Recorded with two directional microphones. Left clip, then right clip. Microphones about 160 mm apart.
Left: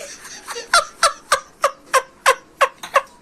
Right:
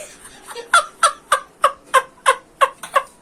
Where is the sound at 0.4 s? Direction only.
20° left (ahead or behind).